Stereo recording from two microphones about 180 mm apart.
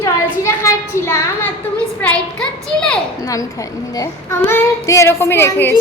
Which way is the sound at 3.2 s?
20° left (ahead or behind).